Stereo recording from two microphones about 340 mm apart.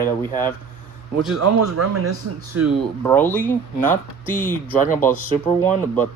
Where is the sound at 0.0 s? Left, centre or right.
Centre.